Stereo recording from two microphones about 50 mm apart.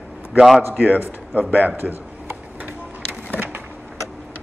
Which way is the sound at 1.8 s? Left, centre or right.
Right.